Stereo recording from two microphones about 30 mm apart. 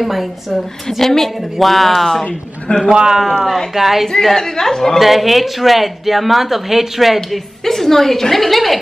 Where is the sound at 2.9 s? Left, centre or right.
Right.